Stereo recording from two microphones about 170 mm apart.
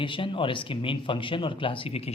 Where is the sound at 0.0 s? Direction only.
30° left (ahead or behind).